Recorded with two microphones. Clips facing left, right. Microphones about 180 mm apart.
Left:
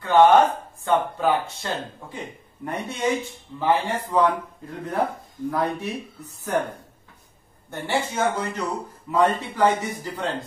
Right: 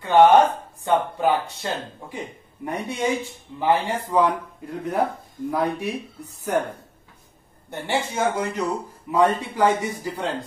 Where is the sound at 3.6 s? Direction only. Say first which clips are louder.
Right 1 dB; 15° right (ahead or behind).